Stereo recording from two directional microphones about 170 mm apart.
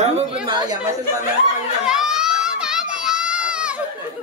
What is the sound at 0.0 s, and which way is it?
Speech, 40° right (ahead or behind).